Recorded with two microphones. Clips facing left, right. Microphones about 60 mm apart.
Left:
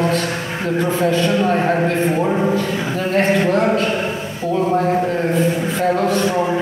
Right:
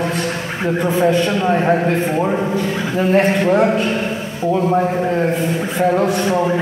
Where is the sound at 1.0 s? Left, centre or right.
Centre.